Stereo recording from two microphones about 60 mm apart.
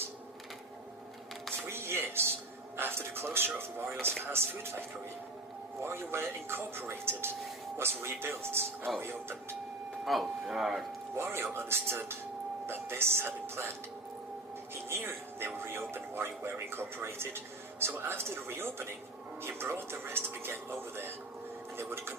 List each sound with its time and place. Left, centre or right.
1.6 s music: right
4.3 s speech: right
5.8 s speech: right
10.1 s speech: centre
11.2 s speech: right
14.8 s speech: right